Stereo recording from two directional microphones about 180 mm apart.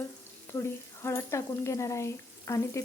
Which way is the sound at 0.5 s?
15° left (ahead or behind).